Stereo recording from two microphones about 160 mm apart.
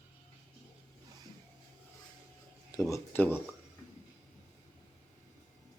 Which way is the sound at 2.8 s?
15° left (ahead or behind).